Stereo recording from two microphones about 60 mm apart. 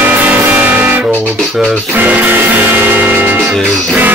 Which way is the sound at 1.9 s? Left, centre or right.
Right.